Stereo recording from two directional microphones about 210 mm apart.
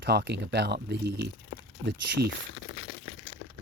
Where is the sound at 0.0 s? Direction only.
50° right (ahead or behind).